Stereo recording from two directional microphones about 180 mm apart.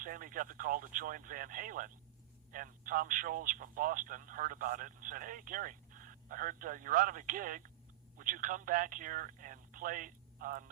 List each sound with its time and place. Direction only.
0.0 s speech: 50° right (ahead or behind)